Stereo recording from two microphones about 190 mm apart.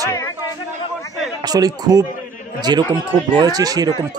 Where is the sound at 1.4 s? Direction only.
20° right (ahead or behind).